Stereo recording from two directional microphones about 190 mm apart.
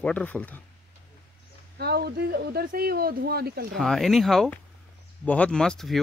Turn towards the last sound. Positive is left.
turn(degrees=5)  # may be behind; listen again after turning